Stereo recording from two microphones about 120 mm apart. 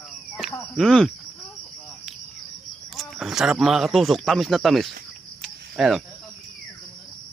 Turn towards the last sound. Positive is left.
turn(degrees=0)  # may be behind; listen again after turning